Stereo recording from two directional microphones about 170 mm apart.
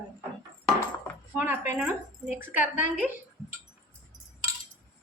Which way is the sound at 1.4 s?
10° right (ahead or behind).